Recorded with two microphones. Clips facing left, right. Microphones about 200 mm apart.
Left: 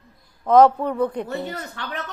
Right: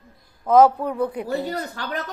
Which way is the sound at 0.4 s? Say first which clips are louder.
Left 1 dB; 5° right (ahead or behind).